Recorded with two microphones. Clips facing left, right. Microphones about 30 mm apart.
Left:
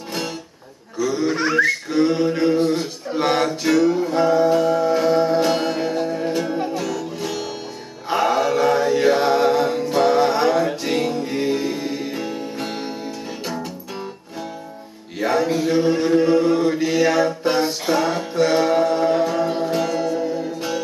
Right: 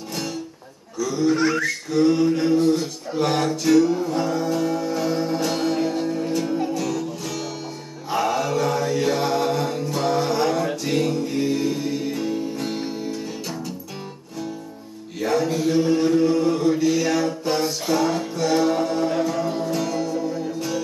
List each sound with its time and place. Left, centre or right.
0.1 s music: left
0.9 s a sound: left
3.4 s music: centre
15.1 s chant: left
17.4 s music: left